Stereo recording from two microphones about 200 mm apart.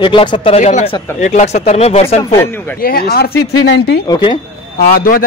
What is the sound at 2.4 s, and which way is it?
Speech, 10° left (ahead or behind).